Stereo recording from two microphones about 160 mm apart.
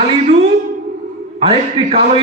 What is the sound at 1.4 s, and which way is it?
Speech, 35° right (ahead or behind).